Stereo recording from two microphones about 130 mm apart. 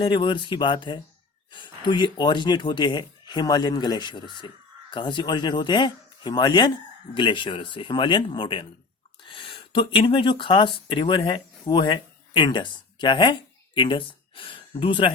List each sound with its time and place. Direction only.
0.0 s speech: 40° left (ahead or behind)